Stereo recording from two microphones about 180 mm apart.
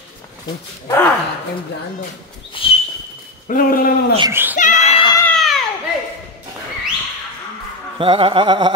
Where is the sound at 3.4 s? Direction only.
50° left (ahead or behind).